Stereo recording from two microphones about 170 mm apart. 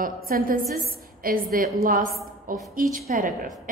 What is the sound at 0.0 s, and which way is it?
A woman's voice, 55° right (ahead or behind).